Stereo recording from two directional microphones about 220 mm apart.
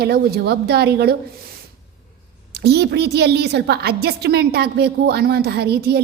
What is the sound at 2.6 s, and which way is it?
A woman's voice, 50° right (ahead or behind).